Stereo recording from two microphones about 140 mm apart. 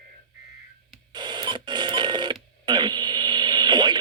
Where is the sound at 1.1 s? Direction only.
35° right (ahead or behind).